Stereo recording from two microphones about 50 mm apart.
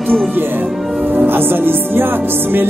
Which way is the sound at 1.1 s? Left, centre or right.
Right.